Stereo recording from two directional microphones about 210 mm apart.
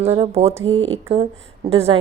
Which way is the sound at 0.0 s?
30° right (ahead or behind).